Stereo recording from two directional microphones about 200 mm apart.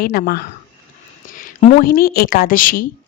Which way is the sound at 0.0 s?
50° left (ahead or behind).